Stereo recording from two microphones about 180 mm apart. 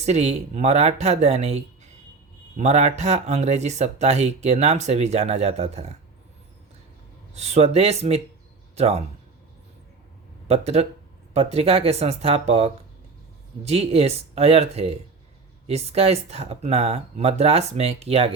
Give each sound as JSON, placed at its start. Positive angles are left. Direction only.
{"t": 0.0, "sound": "speech", "side_deg": -40}
{"t": 7.3, "sound": "speech", "side_deg": -40}
{"t": 10.5, "sound": "speech", "side_deg": -35}